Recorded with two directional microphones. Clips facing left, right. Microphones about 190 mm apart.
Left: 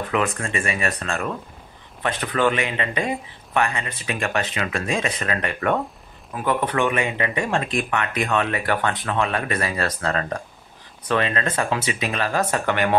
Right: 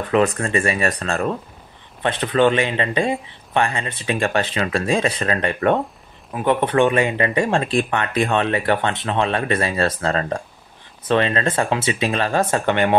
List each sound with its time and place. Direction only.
0.4 s speech: 35° right (ahead or behind)